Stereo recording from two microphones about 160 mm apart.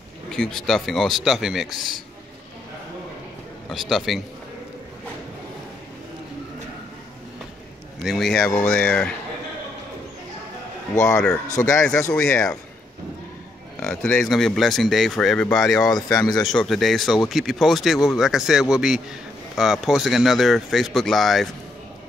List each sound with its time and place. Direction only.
0.3 s speech: 5° left (ahead or behind)
3.9 s speech: centre (ahead or behind)
8.0 s speech: centre (ahead or behind)
11.5 s speech: 20° left (ahead or behind)
12.1 s speech: 5° left (ahead or behind)
13.7 s speech: 5° left (ahead or behind)
16.2 s speech: 25° left (ahead or behind)
16.4 s speech: centre (ahead or behind)